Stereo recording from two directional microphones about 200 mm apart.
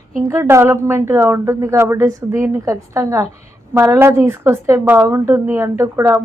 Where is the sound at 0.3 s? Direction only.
15° right (ahead or behind).